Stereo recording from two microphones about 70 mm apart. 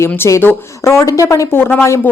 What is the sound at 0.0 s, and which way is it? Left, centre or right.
Speech, left.